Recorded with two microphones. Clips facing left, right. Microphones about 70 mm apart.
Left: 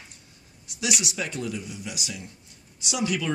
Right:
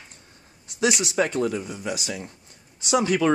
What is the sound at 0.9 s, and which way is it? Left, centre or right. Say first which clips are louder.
Speech: right 7 dB; right.